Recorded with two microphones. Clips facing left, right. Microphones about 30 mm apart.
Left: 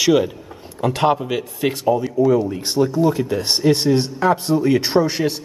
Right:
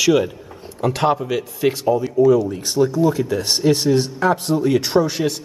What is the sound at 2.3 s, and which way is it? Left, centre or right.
Speech, left.